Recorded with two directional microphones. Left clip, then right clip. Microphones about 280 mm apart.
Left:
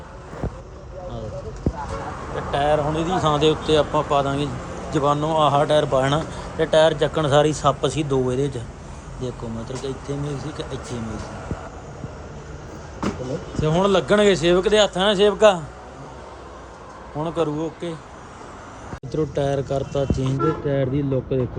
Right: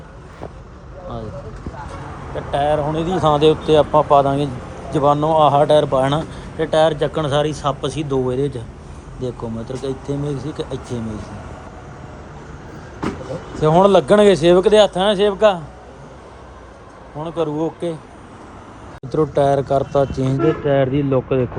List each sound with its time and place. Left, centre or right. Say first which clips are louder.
2.3 s speech: right 2 dB; centre
13.6 s speech: right 7 dB; centre
17.2 s speech: right 1 dB; centre
17.6 s speech: right 6 dB; centre
19.1 s speech: right 7 dB; centre